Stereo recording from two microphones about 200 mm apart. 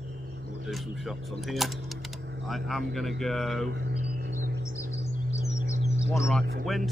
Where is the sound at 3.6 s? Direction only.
60° right (ahead or behind).